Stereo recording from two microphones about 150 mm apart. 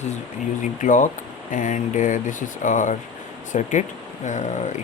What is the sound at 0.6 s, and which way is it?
Speech, 60° left (ahead or behind).